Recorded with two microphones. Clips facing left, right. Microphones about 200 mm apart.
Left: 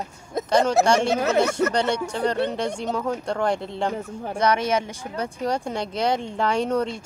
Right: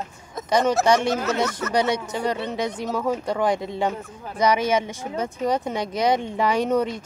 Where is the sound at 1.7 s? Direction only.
10° right (ahead or behind).